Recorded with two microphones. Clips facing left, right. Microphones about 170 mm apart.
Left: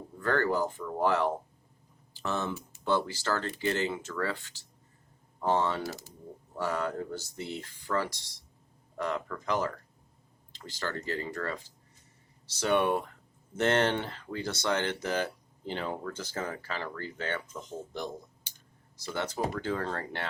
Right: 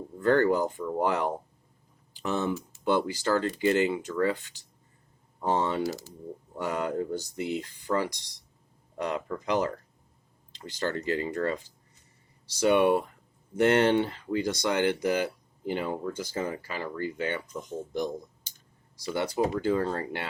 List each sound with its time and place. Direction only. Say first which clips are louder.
0.2 s speech: right 5 dB; 20° right (ahead or behind)
5.8 s speech: right 7 dB; 55° left (ahead or behind)
6.6 s speech: right 2 dB; 20° right (ahead or behind)
18.9 s speech: right 5 dB; 10° right (ahead or behind)